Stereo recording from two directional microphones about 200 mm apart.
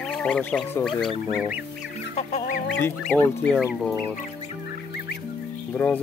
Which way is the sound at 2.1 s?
40° left (ahead or behind).